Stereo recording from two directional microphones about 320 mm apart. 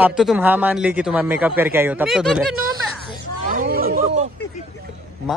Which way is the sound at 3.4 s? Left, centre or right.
Right.